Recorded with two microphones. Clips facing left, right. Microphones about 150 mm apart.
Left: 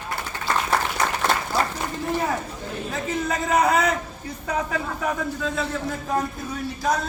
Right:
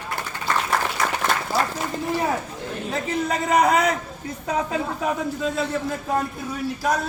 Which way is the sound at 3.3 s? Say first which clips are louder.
Right 1 dB; 10° right (ahead or behind).